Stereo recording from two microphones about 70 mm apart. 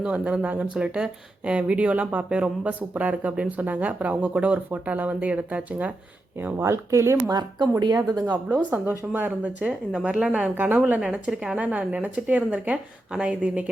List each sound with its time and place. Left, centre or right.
0.0 s speech: centre
6.3 s speech: right
7.3 s speech: right
8.4 s speech: right